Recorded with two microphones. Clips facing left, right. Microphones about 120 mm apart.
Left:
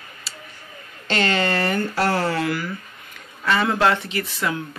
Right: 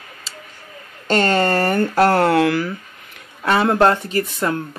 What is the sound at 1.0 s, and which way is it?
Speech, 45° right (ahead or behind).